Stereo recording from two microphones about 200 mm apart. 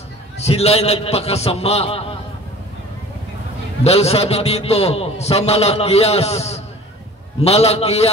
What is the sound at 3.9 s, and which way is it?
A man's voice, 30° left (ahead or behind).